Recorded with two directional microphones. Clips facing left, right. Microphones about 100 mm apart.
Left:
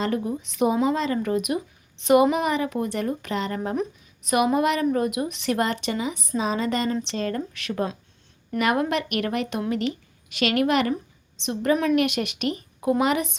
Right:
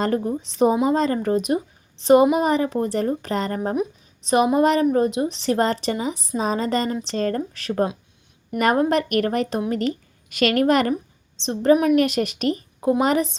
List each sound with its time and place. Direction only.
0.0 s a woman's voice: 40° right (ahead or behind)
11.3 s a woman's voice: 30° right (ahead or behind)